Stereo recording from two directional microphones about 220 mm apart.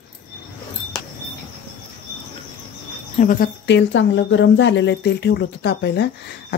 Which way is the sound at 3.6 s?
55° left (ahead or behind).